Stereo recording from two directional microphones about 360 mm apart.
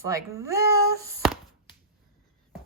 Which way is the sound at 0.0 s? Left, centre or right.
Centre.